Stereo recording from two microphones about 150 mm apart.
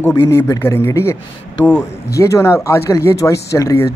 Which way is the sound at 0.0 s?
15° left (ahead or behind).